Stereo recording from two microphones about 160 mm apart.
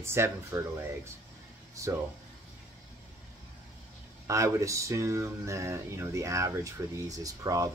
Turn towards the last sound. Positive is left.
turn(degrees=-20)  # may be behind; listen again after turning